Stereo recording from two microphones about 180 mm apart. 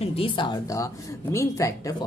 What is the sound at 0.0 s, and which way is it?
A woman's voice, 30° left (ahead or behind).